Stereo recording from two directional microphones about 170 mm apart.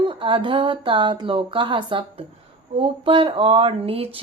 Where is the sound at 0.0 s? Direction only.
30° right (ahead or behind).